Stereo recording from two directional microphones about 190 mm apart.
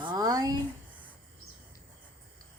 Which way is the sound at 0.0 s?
20° right (ahead or behind).